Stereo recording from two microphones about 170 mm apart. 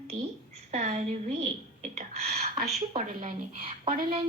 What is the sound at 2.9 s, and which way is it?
Speech, 50° right (ahead or behind).